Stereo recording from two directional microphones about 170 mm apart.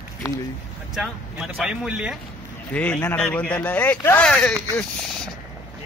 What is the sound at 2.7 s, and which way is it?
Speech, 10° left (ahead or behind).